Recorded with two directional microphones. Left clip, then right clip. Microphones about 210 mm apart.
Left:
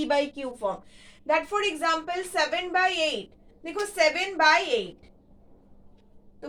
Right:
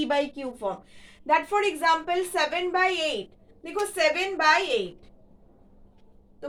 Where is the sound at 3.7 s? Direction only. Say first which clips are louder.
Even; 20° right (ahead or behind).